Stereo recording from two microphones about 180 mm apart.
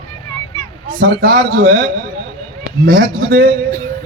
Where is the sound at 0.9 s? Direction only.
55° right (ahead or behind).